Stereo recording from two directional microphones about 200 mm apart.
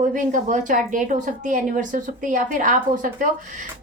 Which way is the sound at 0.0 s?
40° right (ahead or behind).